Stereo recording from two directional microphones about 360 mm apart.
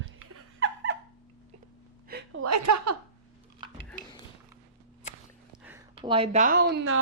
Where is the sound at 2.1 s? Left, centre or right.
Right.